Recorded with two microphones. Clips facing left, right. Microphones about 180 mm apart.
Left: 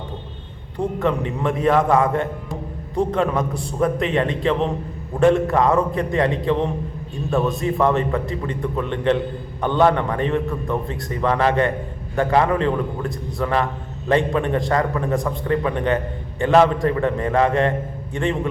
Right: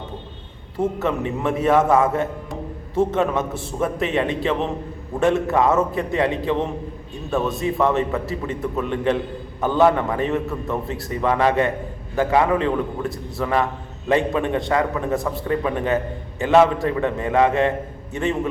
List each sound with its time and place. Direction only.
0.8 s a man's voice: 5° right (ahead or behind)